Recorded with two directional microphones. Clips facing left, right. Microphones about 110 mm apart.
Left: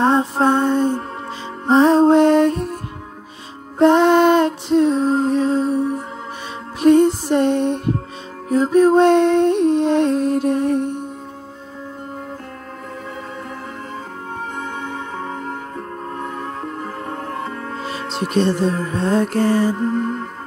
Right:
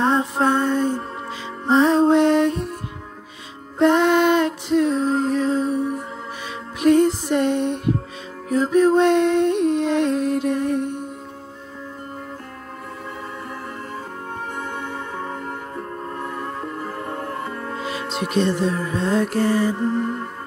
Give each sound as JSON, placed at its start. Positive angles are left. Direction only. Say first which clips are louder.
{"t": 0.0, "sound": "music", "louder": "left 3 dB", "side_deg": 30}
{"t": 3.8, "sound": "music", "louder": "left 4 dB", "side_deg": 35}
{"t": 17.7, "sound": "music", "louder": "even", "side_deg": 35}
{"t": 18.1, "sound": "speech", "louder": "left 3 dB", "side_deg": 35}
{"t": 18.9, "sound": "music", "louder": "left 2 dB", "side_deg": 40}